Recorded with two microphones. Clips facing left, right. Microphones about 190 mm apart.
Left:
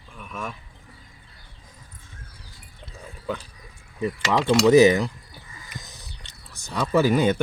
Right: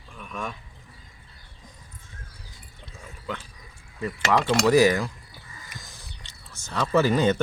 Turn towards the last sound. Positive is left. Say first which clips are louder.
# left 1 dB
turn(degrees=10)  # may be behind; listen again after turning